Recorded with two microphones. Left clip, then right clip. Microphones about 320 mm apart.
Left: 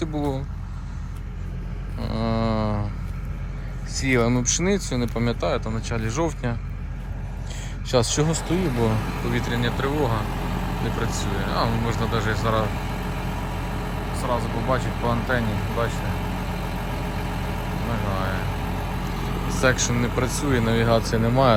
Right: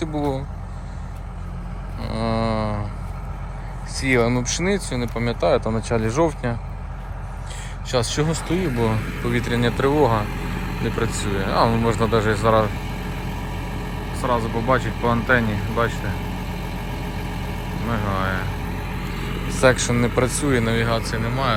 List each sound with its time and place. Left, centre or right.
0.0 s speech: centre
2.0 s mantra: centre
3.9 s speech: centre
7.9 s speech: centre
8.5 s speech: left
8.8 s speech: centre
11.2 s vehicle: centre
21.2 s speech: centre